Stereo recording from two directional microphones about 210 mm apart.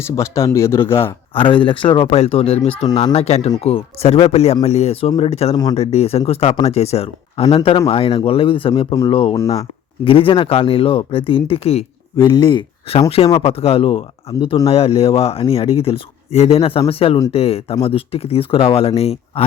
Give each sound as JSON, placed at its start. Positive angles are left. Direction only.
{"t": 0.2, "sound": "speech", "side_deg": 15}
{"t": 1.3, "sound": "speech", "side_deg": 25}